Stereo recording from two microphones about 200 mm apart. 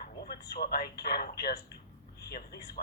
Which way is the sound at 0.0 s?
50° left (ahead or behind).